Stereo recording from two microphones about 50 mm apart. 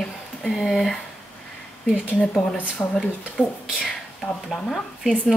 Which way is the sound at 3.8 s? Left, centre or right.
Centre.